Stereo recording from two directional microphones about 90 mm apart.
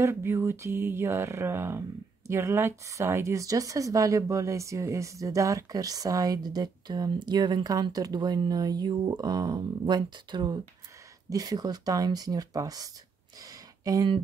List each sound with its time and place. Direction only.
0.0 s mantra: 30° right (ahead or behind)
2.2 s speech: 30° right (ahead or behind); by 10.6 s 55° right (ahead or behind)
11.2 s speech: 45° right (ahead or behind)
13.4 s a sound: 45° right (ahead or behind)